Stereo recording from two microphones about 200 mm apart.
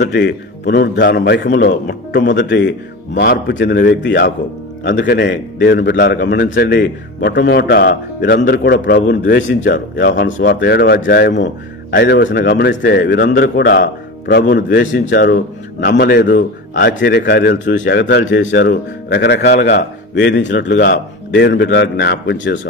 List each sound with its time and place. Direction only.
0.0 s a man's voice: 60° left (ahead or behind)